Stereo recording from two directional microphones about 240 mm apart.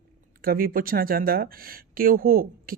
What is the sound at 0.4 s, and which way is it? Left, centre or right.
Speech, right.